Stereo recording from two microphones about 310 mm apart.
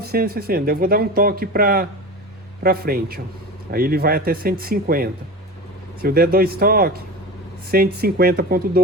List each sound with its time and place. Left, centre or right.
0.0 s a sound: right
0.3 s speech: right
7.9 s speech: right